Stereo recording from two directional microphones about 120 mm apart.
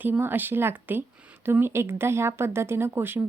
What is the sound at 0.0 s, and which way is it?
Speech, 15° right (ahead or behind).